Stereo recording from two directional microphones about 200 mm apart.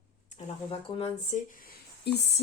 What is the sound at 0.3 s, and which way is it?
Speech, 30° left (ahead or behind).